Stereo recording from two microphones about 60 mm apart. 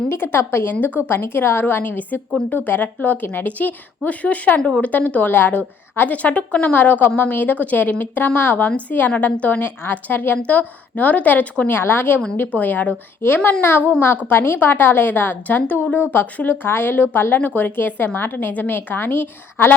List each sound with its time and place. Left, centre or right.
0.1 s a woman's voice: left
9.6 s a woman's voice: left
11.7 s a woman's voice: left
12.4 s speech: left
13.2 s a woman's voice: left
16.6 s a woman's voice: left